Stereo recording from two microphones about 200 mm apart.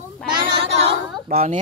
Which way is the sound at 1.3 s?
40° right (ahead or behind).